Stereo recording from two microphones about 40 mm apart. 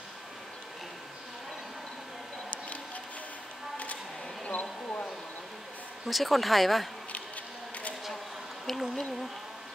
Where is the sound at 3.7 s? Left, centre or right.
Left.